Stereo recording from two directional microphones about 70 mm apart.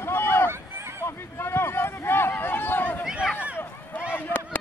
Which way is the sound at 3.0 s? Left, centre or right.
Centre.